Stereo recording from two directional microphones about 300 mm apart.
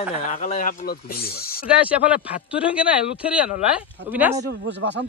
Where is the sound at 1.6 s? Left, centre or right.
Centre.